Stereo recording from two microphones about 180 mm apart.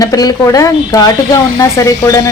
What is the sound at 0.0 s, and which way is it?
Speech, 20° left (ahead or behind).